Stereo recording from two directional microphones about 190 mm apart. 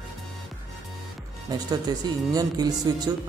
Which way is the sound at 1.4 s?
20° right (ahead or behind).